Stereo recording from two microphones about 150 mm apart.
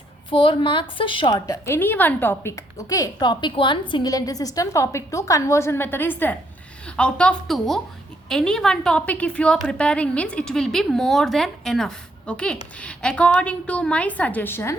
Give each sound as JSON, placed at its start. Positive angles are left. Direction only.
{"t": 0.3, "sound": "a woman's voice", "side_deg": 35}
{"t": 1.5, "sound": "a woman's voice", "side_deg": 15}